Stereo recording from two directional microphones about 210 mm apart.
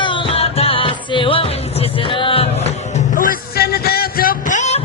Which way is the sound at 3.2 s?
45° left (ahead or behind).